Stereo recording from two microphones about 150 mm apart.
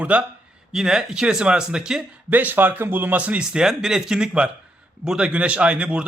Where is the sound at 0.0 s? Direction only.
10° right (ahead or behind).